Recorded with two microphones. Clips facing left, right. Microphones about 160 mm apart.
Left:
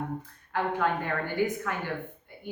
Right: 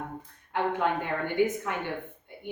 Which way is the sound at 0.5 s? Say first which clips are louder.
Even; 20° right (ahead or behind).